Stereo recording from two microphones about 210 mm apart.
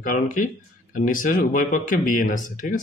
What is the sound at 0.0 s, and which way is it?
Speech, 40° left (ahead or behind).